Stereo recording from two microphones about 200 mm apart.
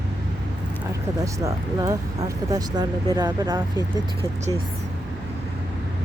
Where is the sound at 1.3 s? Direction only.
15° right (ahead or behind).